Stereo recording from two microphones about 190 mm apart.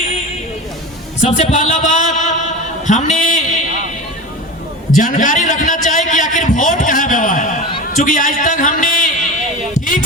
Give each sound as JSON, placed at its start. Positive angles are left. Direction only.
{"t": 1.2, "sound": "a man's voice", "side_deg": 40}
{"t": 4.9, "sound": "a man's voice", "side_deg": 45}